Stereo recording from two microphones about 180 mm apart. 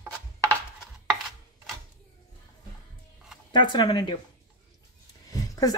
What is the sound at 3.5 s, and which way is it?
Speech, 25° left (ahead or behind).